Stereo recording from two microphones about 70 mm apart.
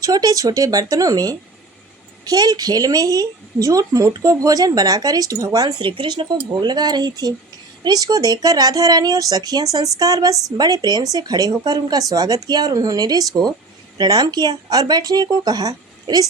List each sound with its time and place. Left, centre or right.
0.0 s a woman's voice: right
14.0 s speech: right